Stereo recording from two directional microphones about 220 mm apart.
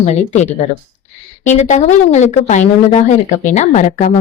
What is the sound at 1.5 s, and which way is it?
Speech, 30° left (ahead or behind).